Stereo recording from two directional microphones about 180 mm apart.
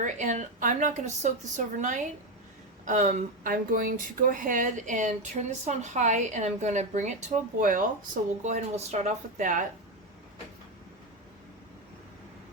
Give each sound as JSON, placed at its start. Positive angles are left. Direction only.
{"t": 0.0, "sound": "speech", "side_deg": -45}